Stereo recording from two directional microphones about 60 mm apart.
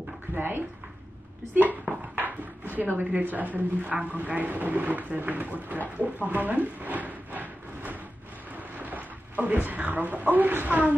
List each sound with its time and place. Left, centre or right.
0.3 s a woman's voice: right
6.2 s a sound: right
9.4 s a woman's voice: right